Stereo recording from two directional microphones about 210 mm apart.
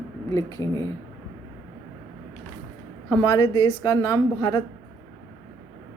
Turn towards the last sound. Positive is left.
turn(degrees=15)  # may be behind; listen again after turning